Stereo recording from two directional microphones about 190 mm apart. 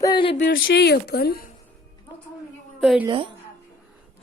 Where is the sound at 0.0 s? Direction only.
25° left (ahead or behind).